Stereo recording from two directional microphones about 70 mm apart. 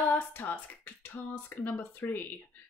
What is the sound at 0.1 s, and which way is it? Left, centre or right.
A woman's voice, left.